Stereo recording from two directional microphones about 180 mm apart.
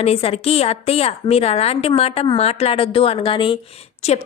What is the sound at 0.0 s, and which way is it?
A woman's voice, 35° left (ahead or behind).